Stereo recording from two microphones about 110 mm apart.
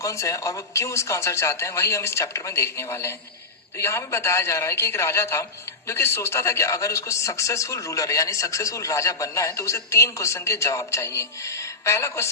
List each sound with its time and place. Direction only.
0.0 s speech: 30° left (ahead or behind)